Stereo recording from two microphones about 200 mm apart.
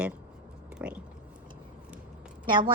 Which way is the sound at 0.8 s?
10° right (ahead or behind).